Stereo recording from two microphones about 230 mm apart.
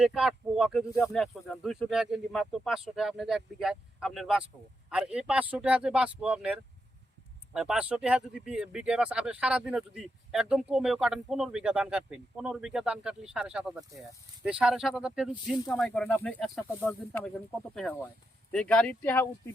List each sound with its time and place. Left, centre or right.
0.0 s speech: centre
18.5 s speech: centre